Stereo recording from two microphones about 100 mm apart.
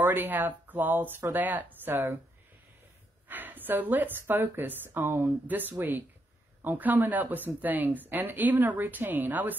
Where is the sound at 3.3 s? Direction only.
20° right (ahead or behind).